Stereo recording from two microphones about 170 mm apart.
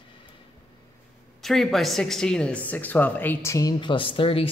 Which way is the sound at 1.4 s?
Centre (ahead or behind).